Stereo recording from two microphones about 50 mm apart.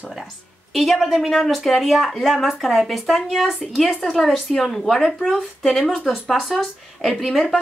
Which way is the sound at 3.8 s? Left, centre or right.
Centre.